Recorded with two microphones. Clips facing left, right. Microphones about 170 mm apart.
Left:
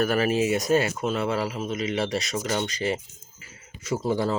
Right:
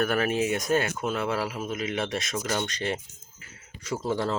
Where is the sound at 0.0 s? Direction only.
5° left (ahead or behind).